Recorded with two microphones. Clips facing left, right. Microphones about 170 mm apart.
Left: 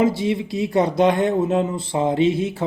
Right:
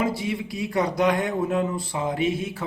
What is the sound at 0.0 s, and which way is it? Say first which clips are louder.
Speech: left 7 dB; 25° left (ahead or behind).